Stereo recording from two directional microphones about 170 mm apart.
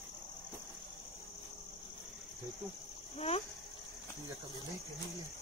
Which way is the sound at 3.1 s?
35° left (ahead or behind).